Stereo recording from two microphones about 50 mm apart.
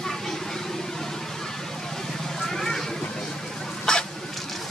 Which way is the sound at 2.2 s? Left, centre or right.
Centre.